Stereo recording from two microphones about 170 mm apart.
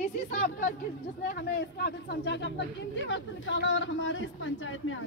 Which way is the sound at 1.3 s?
65° left (ahead or behind).